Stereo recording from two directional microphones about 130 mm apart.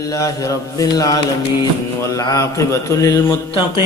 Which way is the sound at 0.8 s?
25° left (ahead or behind).